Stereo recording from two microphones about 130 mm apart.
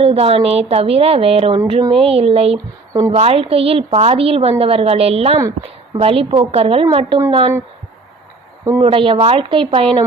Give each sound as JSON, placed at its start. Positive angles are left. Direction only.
{"t": 0.0, "sound": "a woman's voice", "side_deg": -50}
{"t": 5.4, "sound": "a woman's voice", "side_deg": -25}
{"t": 6.0, "sound": "a woman's voice", "side_deg": -45}
{"t": 8.8, "sound": "a woman's voice", "side_deg": -45}